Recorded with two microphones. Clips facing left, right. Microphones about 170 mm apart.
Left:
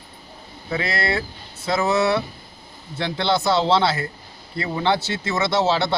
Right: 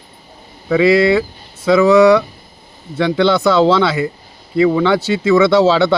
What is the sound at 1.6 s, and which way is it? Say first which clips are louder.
Speech: right 11 dB; 90° right.